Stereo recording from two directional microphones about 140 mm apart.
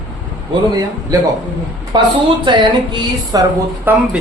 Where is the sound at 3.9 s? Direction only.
15° right (ahead or behind).